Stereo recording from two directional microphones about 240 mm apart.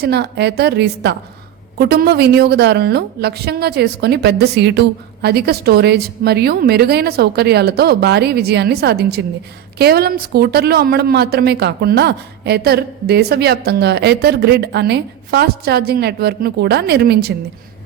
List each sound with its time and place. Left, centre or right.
0.0 s a woman's voice: right